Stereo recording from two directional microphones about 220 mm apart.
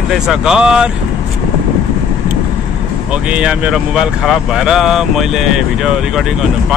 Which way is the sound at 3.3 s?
5° right (ahead or behind).